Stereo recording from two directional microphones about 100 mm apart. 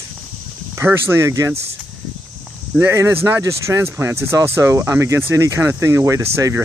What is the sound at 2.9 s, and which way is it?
Speech, 30° right (ahead or behind).